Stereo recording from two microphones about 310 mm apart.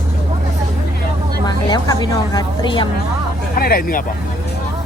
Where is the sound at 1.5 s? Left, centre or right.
Centre.